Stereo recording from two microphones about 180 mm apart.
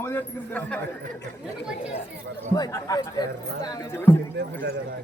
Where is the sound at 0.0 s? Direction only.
10° left (ahead or behind).